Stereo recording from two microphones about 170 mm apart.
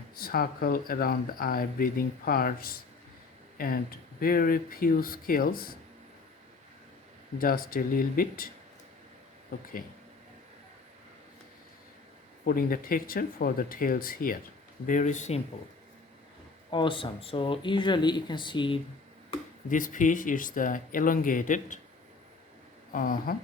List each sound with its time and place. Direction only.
0.2 s speech: 60° left (ahead or behind)
7.3 s speech: 60° left (ahead or behind)
12.5 s speech: 60° left (ahead or behind)
14.8 s speech: 45° left (ahead or behind)
16.7 s speech: 30° left (ahead or behind)
19.7 s speech: 50° left (ahead or behind)
22.9 s a sound: 55° left (ahead or behind)